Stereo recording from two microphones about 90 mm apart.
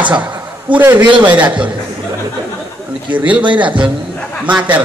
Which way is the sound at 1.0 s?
60° right (ahead or behind).